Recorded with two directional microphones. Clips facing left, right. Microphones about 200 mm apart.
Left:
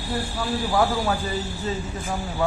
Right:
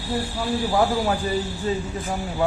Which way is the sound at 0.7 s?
20° right (ahead or behind).